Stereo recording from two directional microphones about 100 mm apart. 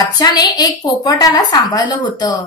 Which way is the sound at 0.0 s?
45° left (ahead or behind).